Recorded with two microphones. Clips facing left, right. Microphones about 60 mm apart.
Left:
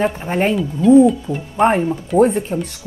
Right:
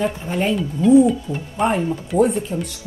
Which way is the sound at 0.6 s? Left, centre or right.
Centre.